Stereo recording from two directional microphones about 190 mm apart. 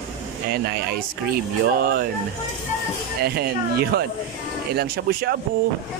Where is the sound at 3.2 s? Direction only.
55° right (ahead or behind).